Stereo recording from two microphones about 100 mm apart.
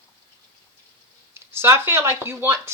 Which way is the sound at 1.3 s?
25° right (ahead or behind).